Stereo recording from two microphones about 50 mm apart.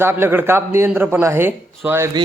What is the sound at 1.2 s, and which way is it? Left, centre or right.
Speech, right.